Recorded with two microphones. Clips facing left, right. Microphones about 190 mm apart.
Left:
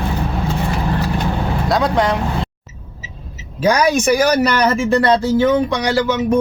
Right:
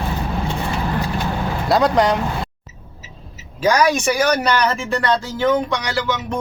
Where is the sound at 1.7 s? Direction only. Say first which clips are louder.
Right 1 dB; centre (ahead or behind).